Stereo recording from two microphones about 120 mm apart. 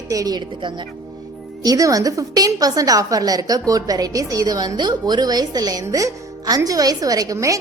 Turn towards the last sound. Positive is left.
turn(degrees=-30)  # may be behind; listen again after turning